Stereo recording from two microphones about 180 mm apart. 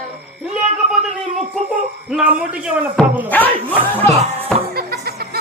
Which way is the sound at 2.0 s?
5° right (ahead or behind).